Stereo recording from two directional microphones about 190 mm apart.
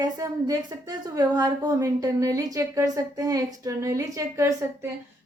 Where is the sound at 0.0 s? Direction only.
20° right (ahead or behind).